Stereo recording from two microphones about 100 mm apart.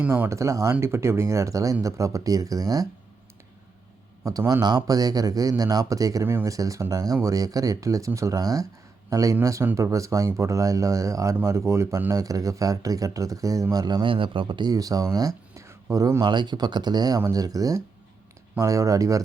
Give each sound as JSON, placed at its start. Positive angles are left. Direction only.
{"t": 0.1, "sound": "speech", "side_deg": -25}
{"t": 4.2, "sound": "speech", "side_deg": -35}
{"t": 15.5, "sound": "a sound", "side_deg": -30}
{"t": 16.2, "sound": "speech", "side_deg": -50}